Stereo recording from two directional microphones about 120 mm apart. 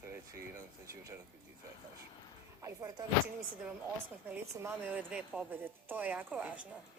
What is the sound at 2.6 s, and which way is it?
Speech, 25° right (ahead or behind).